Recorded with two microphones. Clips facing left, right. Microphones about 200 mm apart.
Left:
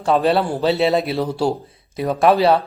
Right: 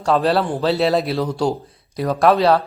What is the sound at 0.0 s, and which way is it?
Speech, centre (ahead or behind).